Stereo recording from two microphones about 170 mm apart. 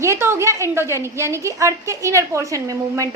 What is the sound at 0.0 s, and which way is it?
A woman's voice, 15° right (ahead or behind).